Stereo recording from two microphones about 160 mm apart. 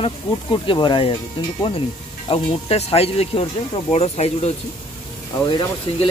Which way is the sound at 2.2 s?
35° left (ahead or behind).